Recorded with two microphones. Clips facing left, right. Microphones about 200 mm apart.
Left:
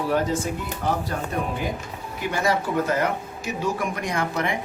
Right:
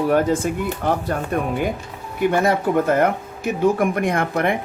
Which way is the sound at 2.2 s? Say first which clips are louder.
Right 6 dB; 55° right (ahead or behind).